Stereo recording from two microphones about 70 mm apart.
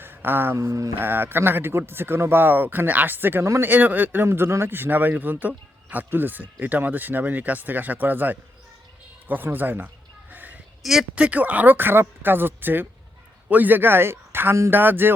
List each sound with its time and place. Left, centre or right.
0.0 s a sound: right
0.5 s mantra: right
0.9 s speech: right
3.6 s speech: right
4.3 s speech: right
9.2 s a sound: right
11.1 s a man's voice: centre